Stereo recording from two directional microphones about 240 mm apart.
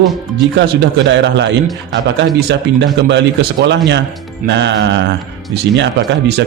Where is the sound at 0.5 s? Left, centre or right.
Right.